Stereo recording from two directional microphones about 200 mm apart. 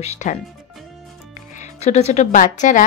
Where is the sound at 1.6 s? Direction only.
35° left (ahead or behind).